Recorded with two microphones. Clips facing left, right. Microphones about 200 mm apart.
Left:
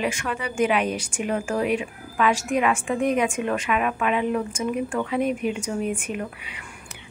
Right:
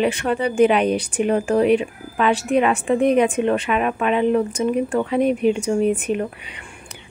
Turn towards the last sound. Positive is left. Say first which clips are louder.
# right 2 dB
turn(degrees=-35)  # may be behind; listen again after turning